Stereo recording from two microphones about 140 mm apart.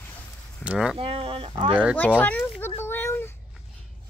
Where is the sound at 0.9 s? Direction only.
40° right (ahead or behind).